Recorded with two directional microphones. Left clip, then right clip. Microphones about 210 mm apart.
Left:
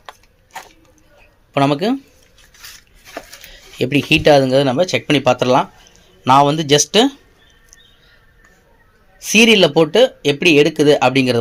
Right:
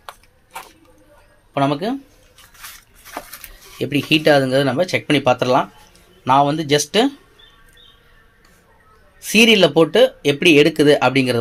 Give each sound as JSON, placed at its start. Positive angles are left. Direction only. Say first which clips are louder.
{"t": 1.5, "sound": "speech", "louder": "left 3 dB", "side_deg": 35}
{"t": 3.8, "sound": "speech", "louder": "left 3 dB", "side_deg": 25}
{"t": 6.2, "sound": "speech", "louder": "left 3 dB", "side_deg": 30}
{"t": 9.2, "sound": "speech", "louder": "left 2 dB", "side_deg": 10}